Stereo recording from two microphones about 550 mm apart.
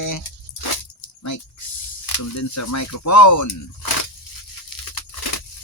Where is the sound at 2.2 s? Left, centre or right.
Left.